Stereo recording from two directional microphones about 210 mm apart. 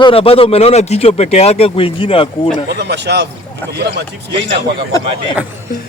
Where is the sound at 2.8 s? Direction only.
55° right (ahead or behind).